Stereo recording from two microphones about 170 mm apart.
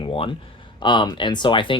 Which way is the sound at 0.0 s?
30° left (ahead or behind).